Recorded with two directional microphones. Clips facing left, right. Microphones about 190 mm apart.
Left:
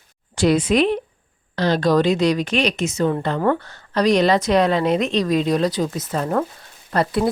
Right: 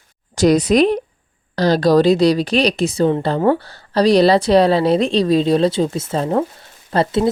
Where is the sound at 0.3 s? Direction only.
40° right (ahead or behind).